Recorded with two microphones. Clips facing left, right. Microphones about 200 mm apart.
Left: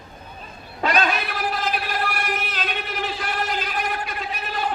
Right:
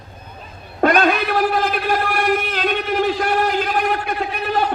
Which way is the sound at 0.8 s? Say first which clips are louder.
Right 7 dB; 55° right (ahead or behind).